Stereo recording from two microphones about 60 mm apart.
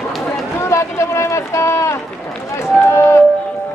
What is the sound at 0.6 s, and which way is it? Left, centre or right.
Run, left.